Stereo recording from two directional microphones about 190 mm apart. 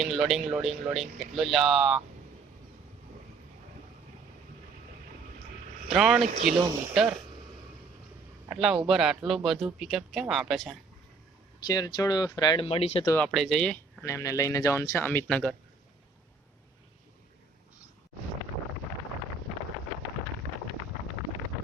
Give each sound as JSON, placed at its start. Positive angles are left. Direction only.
{"t": 0.0, "sound": "speech", "side_deg": 0}
{"t": 5.9, "sound": "speech", "side_deg": 0}
{"t": 8.4, "sound": "speech", "side_deg": 0}
{"t": 11.6, "sound": "speech", "side_deg": 20}
{"t": 13.1, "sound": "speech", "side_deg": 5}
{"t": 14.0, "sound": "speech", "side_deg": 15}